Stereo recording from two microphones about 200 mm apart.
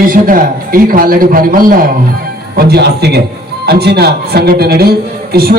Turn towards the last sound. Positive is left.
turn(degrees=-50)  # may be behind; listen again after turning